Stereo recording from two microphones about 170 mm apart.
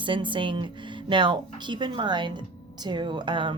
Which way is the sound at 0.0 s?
30° right (ahead or behind).